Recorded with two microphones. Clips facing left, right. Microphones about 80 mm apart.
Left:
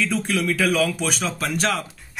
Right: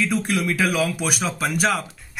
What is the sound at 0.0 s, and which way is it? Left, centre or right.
Speech, centre.